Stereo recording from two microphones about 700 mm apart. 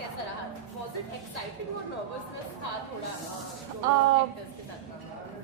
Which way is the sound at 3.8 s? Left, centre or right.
Right.